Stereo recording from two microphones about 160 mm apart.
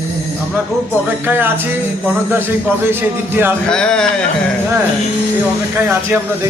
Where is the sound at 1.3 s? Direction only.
15° right (ahead or behind).